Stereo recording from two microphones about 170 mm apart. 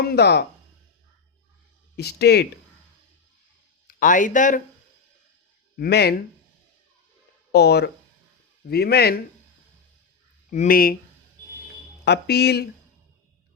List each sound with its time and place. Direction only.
0.0 s speech: 70° left (ahead or behind)
2.0 s speech: 70° left (ahead or behind)
3.8 s speech: 50° left (ahead or behind)
5.7 s speech: 65° left (ahead or behind)
7.5 s speech: 75° left (ahead or behind)
10.5 s speech: 50° left (ahead or behind)
12.0 s speech: 75° left (ahead or behind)